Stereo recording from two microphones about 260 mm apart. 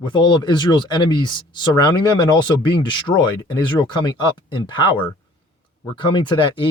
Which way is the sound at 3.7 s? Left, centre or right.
Centre.